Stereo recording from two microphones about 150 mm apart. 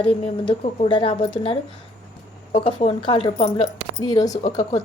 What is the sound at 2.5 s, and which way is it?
Speech, 40° left (ahead or behind).